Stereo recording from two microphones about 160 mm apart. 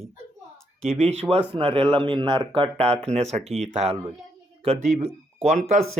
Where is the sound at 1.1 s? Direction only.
40° right (ahead or behind).